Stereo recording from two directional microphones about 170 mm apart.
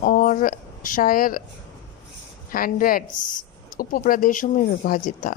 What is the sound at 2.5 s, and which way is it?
A woman's voice, 55° left (ahead or behind).